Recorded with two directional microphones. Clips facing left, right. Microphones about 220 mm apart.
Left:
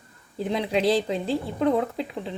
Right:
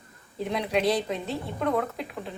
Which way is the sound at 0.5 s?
30° left (ahead or behind).